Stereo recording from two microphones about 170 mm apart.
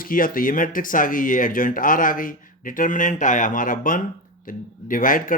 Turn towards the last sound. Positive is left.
turn(degrees=55)  # may be behind; listen again after turning